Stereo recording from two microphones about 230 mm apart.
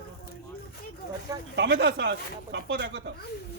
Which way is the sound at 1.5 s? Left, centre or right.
Right.